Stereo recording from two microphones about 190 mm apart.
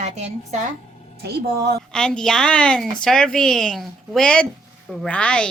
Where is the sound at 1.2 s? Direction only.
60° right (ahead or behind).